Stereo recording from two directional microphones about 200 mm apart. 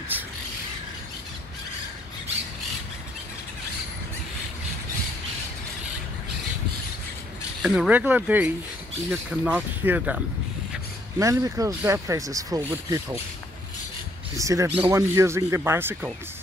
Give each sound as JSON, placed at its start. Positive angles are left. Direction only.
{"t": 7.6, "sound": "speech", "side_deg": -5}
{"t": 14.3, "sound": "speech", "side_deg": -15}